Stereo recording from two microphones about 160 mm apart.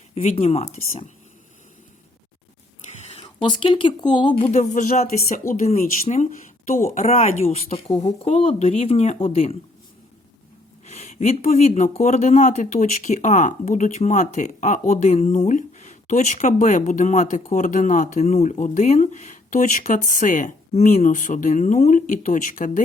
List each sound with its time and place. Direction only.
0.1 s speech: 40° left (ahead or behind)
3.1 s a sound: 35° left (ahead or behind)
3.5 s speech: 30° left (ahead or behind)
4.5 s speech: 50° left (ahead or behind)
10.8 s speech: 45° left (ahead or behind)